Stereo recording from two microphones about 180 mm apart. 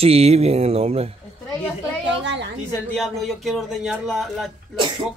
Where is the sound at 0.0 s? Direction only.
35° right (ahead or behind).